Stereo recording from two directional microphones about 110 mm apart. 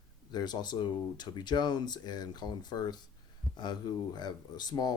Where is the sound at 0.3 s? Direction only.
40° left (ahead or behind).